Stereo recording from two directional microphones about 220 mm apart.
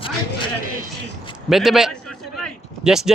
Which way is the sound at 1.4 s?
Centre (ahead or behind).